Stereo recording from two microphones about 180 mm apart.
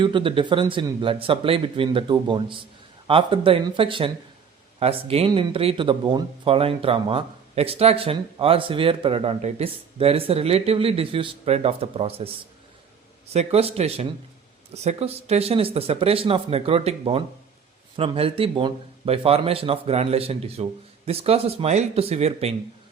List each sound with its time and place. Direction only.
0.0 s speech: 30° right (ahead or behind)
13.3 s speech: 35° right (ahead or behind)